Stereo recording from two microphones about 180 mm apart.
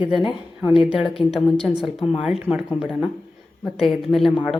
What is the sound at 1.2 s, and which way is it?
Speech, centre (ahead or behind).